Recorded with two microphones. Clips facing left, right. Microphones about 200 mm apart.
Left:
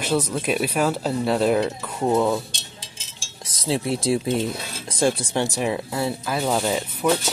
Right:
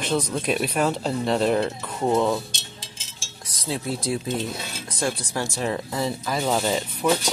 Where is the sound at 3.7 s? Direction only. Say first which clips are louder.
Left 5 dB; 25° left (ahead or behind); by 7.0 s 5° left (ahead or behind).